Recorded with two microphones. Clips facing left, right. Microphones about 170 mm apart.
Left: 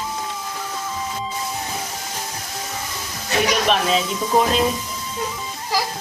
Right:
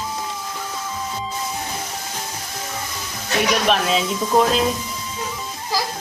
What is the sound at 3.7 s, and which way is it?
Speech, centre (ahead or behind).